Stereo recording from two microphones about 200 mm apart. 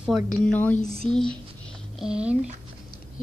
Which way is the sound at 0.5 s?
10° left (ahead or behind).